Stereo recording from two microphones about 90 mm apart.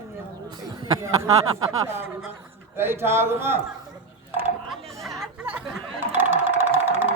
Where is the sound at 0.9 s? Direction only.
40° right (ahead or behind).